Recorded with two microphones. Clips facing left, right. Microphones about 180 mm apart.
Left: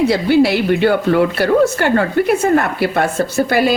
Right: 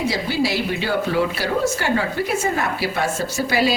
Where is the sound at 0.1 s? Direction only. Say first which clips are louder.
Left 9 dB; 60° left (ahead or behind).